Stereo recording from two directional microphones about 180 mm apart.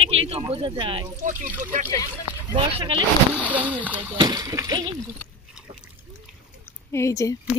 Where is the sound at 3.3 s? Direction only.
10° right (ahead or behind).